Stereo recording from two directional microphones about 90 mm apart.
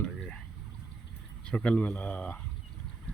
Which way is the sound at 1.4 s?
10° left (ahead or behind).